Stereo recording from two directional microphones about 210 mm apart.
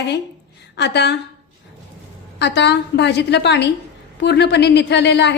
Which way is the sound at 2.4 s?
55° left (ahead or behind).